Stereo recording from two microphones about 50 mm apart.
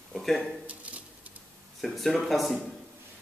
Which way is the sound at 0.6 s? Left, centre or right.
Right.